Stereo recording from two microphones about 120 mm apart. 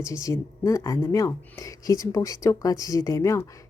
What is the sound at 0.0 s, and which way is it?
Speech, 25° left (ahead or behind).